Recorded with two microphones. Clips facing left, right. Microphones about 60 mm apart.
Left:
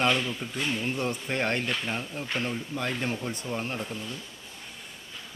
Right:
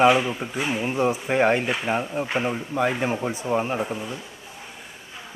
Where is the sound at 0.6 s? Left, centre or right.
Centre.